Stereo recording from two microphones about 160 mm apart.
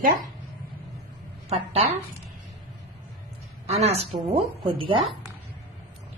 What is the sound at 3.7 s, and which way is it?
Speech, 40° right (ahead or behind).